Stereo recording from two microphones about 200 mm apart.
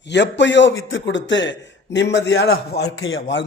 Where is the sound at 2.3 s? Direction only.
55° left (ahead or behind).